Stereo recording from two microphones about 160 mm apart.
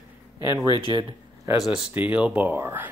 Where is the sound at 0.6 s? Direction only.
25° left (ahead or behind).